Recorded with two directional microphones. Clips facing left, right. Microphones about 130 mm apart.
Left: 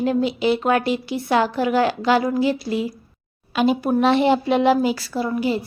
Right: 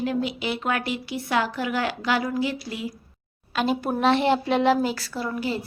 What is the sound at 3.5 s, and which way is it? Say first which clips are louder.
A woman's voice: left 6 dB; 5° left (ahead or behind).